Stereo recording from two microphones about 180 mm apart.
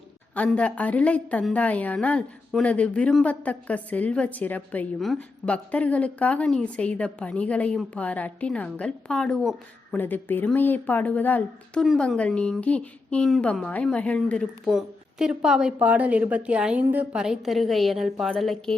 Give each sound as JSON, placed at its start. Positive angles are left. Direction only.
{"t": 0.3, "sound": "a woman's voice", "side_deg": 5}